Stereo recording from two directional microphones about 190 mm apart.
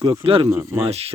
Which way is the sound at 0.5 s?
15° right (ahead or behind).